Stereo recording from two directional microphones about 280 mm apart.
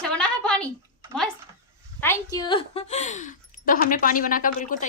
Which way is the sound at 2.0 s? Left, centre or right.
Centre.